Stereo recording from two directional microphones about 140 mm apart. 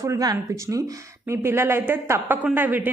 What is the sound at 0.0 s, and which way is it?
A woman's voice, 25° right (ahead or behind).